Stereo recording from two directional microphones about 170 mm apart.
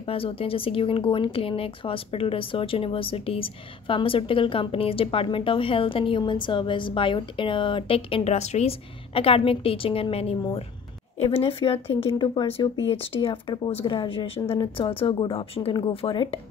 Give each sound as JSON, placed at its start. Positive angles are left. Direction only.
{"t": 0.0, "sound": "speech", "side_deg": 35}